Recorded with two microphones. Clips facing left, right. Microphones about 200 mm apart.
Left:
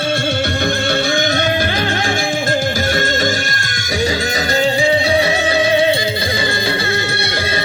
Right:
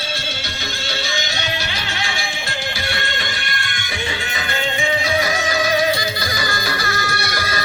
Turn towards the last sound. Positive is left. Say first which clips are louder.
# left 4 dB
turn(degrees=25)  # may be behind; listen again after turning